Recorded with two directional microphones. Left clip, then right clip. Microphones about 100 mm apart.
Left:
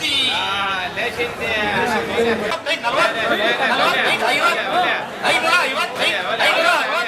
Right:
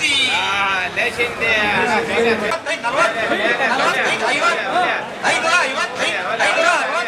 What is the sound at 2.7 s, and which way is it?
A man's voice, 10° left (ahead or behind).